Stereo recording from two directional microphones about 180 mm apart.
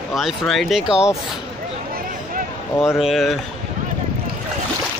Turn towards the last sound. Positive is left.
turn(degrees=0)  # may be behind; listen again after turning